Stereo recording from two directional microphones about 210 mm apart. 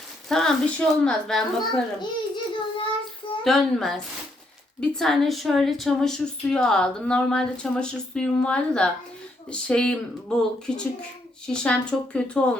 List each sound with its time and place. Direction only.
0.3 s a woman's voice: centre (ahead or behind)
2.0 s child singing: 20° left (ahead or behind)
3.4 s a woman's voice: centre (ahead or behind)
11.4 s a woman's voice: 5° left (ahead or behind)